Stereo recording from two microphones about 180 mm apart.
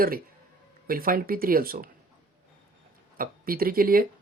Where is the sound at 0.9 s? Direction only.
55° right (ahead or behind).